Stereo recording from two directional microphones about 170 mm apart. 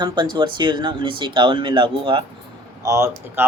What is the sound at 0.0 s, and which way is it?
Speech, 25° right (ahead or behind).